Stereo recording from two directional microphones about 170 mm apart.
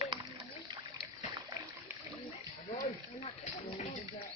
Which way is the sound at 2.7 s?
35° left (ahead or behind).